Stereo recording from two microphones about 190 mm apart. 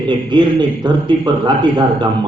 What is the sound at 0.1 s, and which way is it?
A man's voice, 25° right (ahead or behind).